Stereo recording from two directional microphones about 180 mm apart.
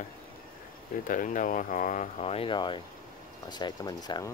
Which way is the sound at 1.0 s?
45° left (ahead or behind).